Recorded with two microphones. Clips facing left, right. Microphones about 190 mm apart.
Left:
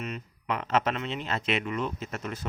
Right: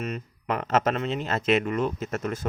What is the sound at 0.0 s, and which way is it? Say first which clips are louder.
Speech: right 4 dB; 45° right (ahead or behind).